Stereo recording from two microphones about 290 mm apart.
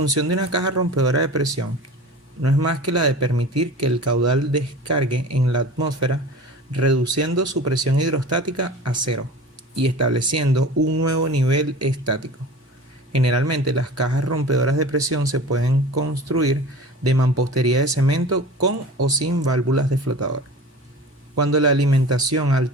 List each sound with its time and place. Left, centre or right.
0.1 s speech: right
21.4 s speech: right